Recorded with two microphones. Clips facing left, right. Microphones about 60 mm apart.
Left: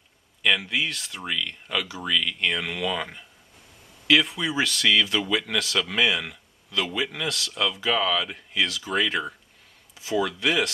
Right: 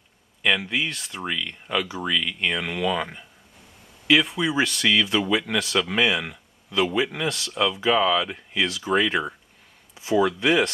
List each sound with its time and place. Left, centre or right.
0.4 s speech: centre